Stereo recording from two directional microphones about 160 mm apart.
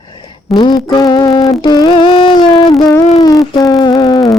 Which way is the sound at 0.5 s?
25° left (ahead or behind).